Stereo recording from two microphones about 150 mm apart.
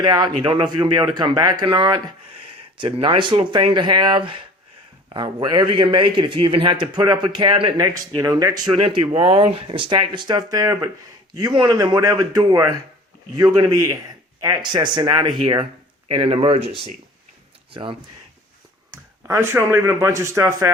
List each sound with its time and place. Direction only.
0.0 s a man's voice: 30° right (ahead or behind)
17.7 s speech: 35° right (ahead or behind)
18.9 s speech: 20° right (ahead or behind)